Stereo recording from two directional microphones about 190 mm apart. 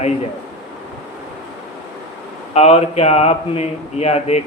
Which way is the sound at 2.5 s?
35° left (ahead or behind).